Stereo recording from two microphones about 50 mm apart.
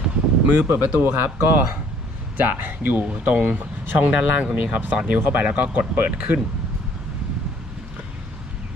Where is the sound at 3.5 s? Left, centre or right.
Right; by 5.2 s centre.